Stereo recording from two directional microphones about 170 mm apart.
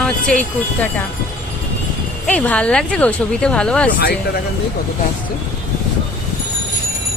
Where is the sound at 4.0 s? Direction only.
65° left (ahead or behind).